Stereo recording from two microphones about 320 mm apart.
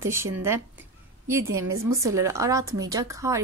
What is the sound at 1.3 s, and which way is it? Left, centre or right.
A woman's voice, centre.